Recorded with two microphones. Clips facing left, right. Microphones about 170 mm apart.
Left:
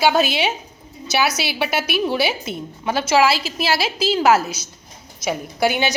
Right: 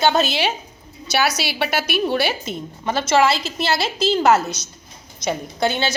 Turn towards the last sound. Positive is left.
turn(degrees=15)  # may be behind; listen again after turning